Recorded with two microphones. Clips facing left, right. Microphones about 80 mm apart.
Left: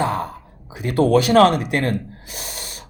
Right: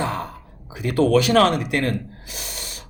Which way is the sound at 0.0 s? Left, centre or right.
Left.